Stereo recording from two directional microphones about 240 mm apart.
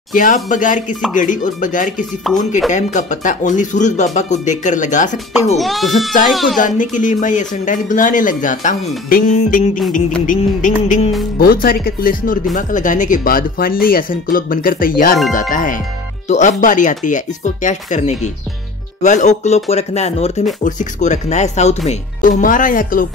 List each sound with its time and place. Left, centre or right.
0.1 s speech: left
5.6 s speech: centre
6.6 s speech: left